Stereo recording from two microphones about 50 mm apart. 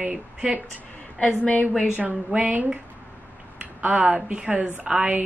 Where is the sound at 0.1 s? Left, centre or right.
Centre.